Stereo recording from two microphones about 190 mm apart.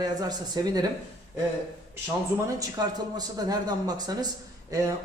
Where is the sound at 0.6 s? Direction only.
20° right (ahead or behind).